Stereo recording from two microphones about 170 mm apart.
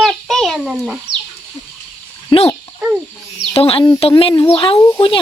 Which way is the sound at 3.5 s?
35° left (ahead or behind).